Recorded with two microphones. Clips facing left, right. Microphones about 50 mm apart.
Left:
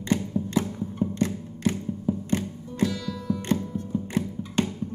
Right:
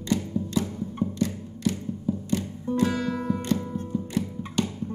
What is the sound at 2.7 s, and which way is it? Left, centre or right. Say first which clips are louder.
Music: right 4 dB; right.